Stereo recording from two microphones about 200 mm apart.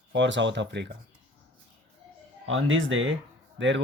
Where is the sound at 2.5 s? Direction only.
75° right (ahead or behind).